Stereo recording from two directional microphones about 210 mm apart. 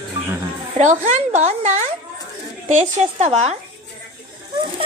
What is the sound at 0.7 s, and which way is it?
A woman's voice, 35° right (ahead or behind).